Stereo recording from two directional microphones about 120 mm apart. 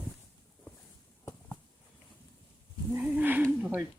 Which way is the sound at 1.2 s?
20° left (ahead or behind).